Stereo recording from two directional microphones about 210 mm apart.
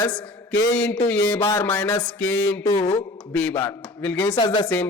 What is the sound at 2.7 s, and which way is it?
Speech, 30° left (ahead or behind).